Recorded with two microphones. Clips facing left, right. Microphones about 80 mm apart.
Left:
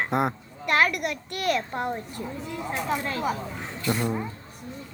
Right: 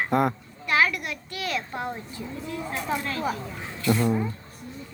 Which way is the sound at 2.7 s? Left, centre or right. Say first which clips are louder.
Left 2 dB; centre.